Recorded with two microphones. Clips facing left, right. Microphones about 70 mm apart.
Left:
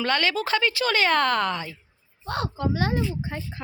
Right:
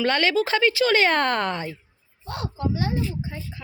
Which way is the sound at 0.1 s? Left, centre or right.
Right.